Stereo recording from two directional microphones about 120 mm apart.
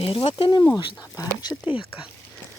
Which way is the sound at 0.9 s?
30° left (ahead or behind).